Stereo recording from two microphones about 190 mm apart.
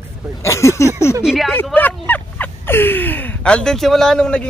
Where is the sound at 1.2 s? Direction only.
5° right (ahead or behind).